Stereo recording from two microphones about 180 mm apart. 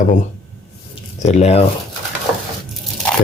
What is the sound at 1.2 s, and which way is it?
Speech, 40° left (ahead or behind).